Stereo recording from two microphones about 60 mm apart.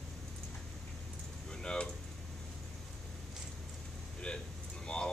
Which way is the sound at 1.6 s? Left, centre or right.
Centre.